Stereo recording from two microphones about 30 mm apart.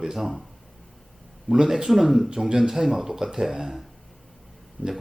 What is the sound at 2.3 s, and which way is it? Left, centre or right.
Speech, centre.